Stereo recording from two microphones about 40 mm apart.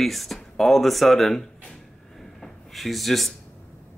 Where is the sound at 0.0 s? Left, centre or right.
Centre.